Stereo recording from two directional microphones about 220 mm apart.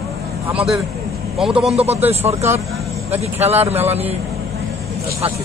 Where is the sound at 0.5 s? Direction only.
Centre (ahead or behind).